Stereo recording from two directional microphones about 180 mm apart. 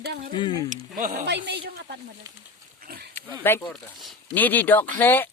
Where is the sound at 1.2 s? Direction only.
70° right (ahead or behind).